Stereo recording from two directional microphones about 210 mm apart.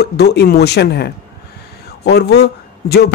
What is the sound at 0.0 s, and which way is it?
A man's voice, 50° left (ahead or behind).